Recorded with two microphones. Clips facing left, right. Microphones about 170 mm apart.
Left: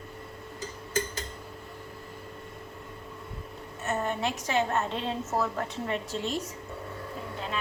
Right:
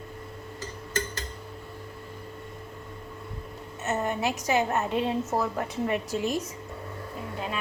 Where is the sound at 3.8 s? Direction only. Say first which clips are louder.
Right 2 dB; 20° right (ahead or behind).